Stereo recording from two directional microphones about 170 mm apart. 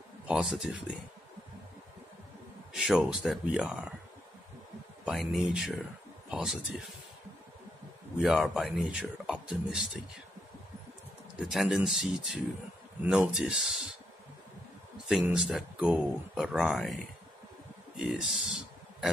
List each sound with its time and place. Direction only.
0.3 s speech: 5° right (ahead or behind)
2.7 s speech: centre (ahead or behind)
5.0 s speech: centre (ahead or behind)
8.2 s speech: centre (ahead or behind)
11.3 s speech: centre (ahead or behind)
15.0 s speech: 5° right (ahead or behind)